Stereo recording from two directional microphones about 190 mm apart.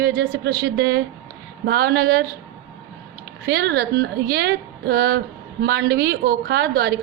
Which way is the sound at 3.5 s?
60° right (ahead or behind).